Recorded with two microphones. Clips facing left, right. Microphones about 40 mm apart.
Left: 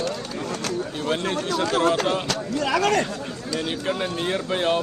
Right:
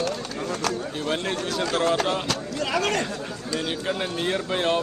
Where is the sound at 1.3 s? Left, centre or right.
Centre.